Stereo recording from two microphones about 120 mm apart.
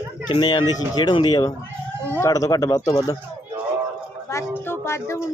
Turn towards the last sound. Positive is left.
turn(degrees=20)  # may be behind; listen again after turning